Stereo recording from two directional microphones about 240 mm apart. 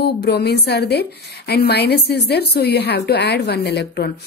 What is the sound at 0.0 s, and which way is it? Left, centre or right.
A woman's voice, left.